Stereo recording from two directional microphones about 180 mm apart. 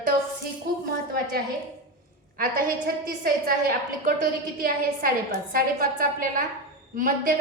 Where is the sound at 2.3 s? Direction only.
55° right (ahead or behind).